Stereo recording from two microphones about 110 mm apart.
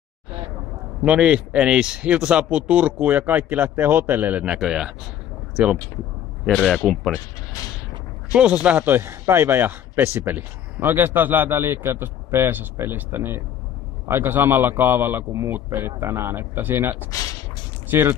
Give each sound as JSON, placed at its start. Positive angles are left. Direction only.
{"t": 1.0, "sound": "speech", "side_deg": -10}
{"t": 6.4, "sound": "a man's voice", "side_deg": 5}
{"t": 8.3, "sound": "speech", "side_deg": -10}